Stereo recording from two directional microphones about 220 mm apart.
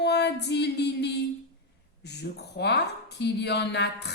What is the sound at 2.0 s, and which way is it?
A woman's voice, 50° left (ahead or behind).